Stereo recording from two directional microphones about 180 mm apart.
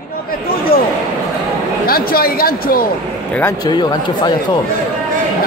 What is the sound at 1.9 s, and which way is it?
Speech, 55° left (ahead or behind).